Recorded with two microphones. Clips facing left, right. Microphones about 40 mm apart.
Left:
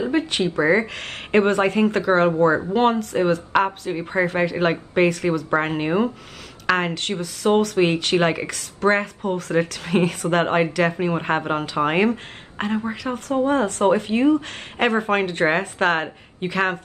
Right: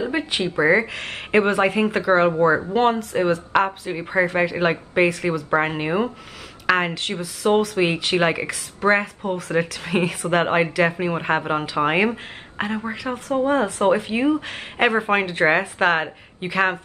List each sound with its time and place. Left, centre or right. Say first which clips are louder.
0.6 s speech: right 2 dB; centre